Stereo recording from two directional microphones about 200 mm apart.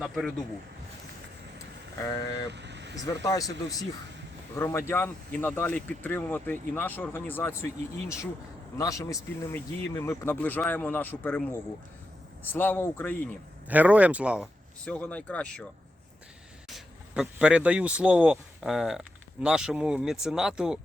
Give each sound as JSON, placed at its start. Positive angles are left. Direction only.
{"t": 0.0, "sound": "speech", "side_deg": 0}
{"t": 2.1, "sound": "speech", "side_deg": 15}
{"t": 2.5, "sound": "vehicle", "side_deg": -60}
{"t": 3.0, "sound": "speech", "side_deg": 15}
{"t": 12.5, "sound": "speech", "side_deg": 10}
{"t": 13.7, "sound": "speech", "side_deg": -5}
{"t": 14.8, "sound": "speech", "side_deg": 5}
{"t": 16.6, "sound": "speech", "side_deg": 0}